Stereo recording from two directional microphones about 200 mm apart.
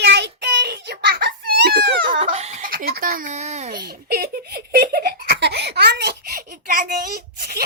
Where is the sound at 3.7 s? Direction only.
50° right (ahead or behind).